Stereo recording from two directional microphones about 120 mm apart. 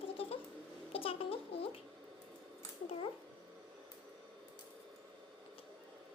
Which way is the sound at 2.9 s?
45° left (ahead or behind).